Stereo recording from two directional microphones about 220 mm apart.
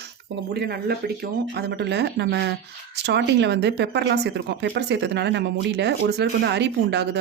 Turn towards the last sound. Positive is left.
turn(degrees=-50)  # may be behind; listen again after turning